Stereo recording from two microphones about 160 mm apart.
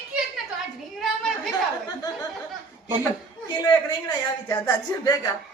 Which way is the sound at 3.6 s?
25° left (ahead or behind).